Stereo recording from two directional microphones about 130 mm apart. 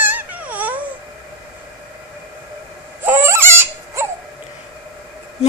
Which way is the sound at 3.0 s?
15° right (ahead or behind).